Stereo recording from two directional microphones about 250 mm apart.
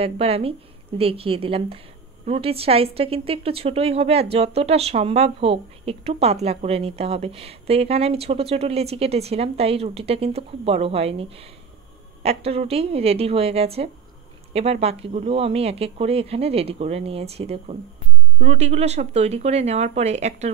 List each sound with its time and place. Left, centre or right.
0.0 s speech: right